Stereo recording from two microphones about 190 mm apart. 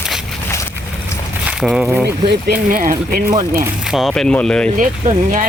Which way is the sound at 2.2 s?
50° right (ahead or behind).